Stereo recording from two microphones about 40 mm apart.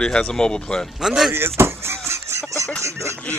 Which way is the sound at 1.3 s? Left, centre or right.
Right.